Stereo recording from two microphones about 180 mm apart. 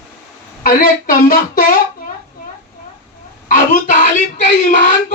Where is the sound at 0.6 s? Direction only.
50° left (ahead or behind).